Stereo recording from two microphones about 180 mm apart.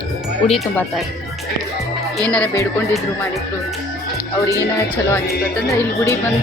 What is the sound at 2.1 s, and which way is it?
Speech, 5° left (ahead or behind).